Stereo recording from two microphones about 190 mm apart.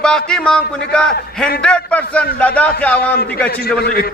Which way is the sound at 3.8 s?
55° left (ahead or behind).